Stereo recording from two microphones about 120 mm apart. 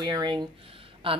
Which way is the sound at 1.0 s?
45° right (ahead or behind).